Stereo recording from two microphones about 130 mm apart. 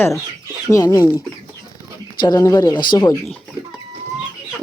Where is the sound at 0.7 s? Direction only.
25° left (ahead or behind).